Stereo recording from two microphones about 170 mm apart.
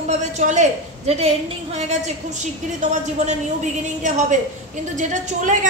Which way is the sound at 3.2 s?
40° right (ahead or behind).